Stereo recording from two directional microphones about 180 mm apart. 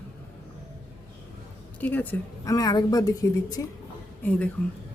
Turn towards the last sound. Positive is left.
turn(degrees=5)  # may be behind; listen again after turning